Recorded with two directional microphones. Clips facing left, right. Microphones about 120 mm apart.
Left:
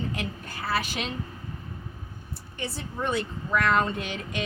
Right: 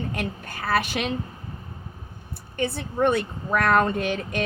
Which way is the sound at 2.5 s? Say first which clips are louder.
Right 8 dB; 55° right (ahead or behind).